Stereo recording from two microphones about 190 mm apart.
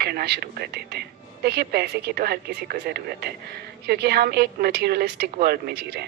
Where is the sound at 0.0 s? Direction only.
55° right (ahead or behind).